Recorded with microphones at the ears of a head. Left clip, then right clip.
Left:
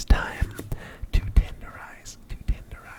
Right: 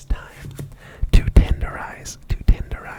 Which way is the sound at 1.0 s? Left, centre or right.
Right.